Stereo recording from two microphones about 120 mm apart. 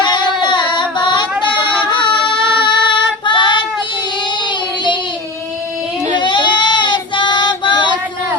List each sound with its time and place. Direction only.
0.0 s a sound: 40° left (ahead or behind)
2.6 s female singing: 40° left (ahead or behind)
6.1 s child singing: 40° left (ahead or behind)